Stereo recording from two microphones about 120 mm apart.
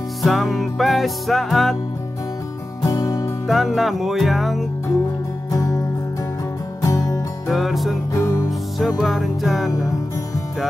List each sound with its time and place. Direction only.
0.2 s music: centre (ahead or behind)
2.8 s music: 30° left (ahead or behind)
3.4 s music: centre (ahead or behind)
5.5 s music: 30° left (ahead or behind)
7.4 s music: centre (ahead or behind)
8.1 s music: 30° left (ahead or behind)
8.5 s music: centre (ahead or behind)
9.7 s music: 30° left (ahead or behind)